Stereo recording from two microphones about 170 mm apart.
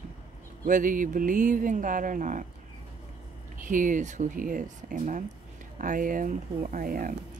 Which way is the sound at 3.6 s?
50° right (ahead or behind).